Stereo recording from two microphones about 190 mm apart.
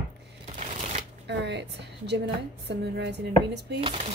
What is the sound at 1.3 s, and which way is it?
Speech, 65° right (ahead or behind).